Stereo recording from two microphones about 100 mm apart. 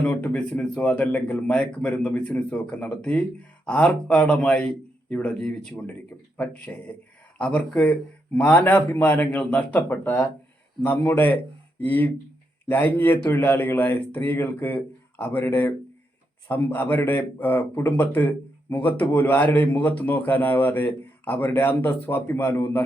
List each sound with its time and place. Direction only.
0.0 s speech: 15° left (ahead or behind)